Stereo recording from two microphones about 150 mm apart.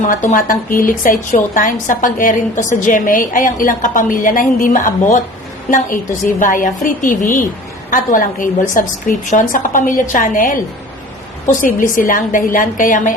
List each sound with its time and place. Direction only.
0.0 s a woman's voice: 60° left (ahead or behind)
6.4 s a woman's voice: 60° left (ahead or behind)